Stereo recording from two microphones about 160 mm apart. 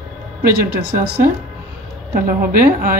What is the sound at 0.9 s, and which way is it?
Speech, 70° right (ahead or behind).